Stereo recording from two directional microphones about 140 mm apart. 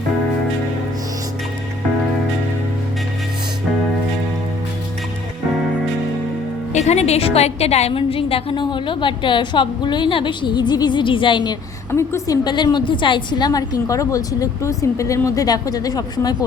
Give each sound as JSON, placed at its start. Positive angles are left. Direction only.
{"t": 6.7, "sound": "a woman's voice", "side_deg": 50}
{"t": 11.9, "sound": "a woman's voice", "side_deg": 20}
{"t": 12.5, "sound": "a woman's voice", "side_deg": 30}